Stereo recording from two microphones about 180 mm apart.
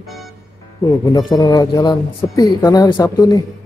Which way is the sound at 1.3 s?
20° left (ahead or behind).